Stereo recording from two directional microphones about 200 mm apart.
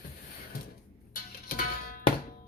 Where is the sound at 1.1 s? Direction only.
45° left (ahead or behind).